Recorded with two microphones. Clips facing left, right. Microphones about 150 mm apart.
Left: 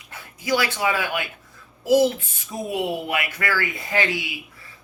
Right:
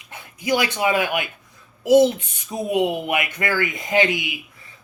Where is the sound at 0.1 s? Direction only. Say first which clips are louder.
Right 2 dB; 20° right (ahead or behind).